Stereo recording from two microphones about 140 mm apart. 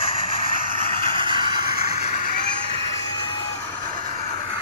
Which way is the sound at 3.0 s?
30° left (ahead or behind).